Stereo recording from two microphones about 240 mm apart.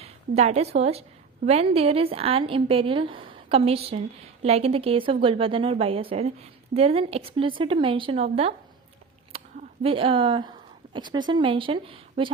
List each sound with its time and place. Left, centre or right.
0.0 s a woman's voice: right
9.3 s a sound: right
10.9 s a woman's voice: centre